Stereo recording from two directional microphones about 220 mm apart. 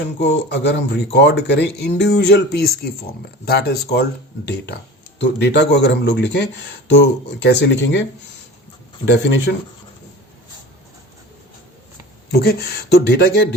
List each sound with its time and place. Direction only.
0.2 s speech: 50° left (ahead or behind)
9.0 s speech: 55° left (ahead or behind)
12.3 s speech: 45° left (ahead or behind)